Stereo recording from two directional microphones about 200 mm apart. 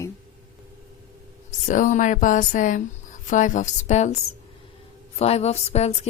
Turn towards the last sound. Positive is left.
turn(degrees=30)  # may be behind; listen again after turning